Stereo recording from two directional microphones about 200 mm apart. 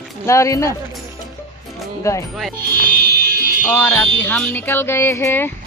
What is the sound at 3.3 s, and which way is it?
Fire alarm, 45° right (ahead or behind).